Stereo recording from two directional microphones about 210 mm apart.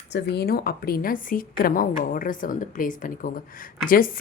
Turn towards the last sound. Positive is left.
turn(degrees=40)  # may be behind; listen again after turning